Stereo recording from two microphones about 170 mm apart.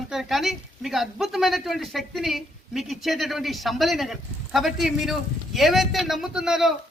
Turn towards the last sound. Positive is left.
turn(degrees=-5)  # may be behind; listen again after turning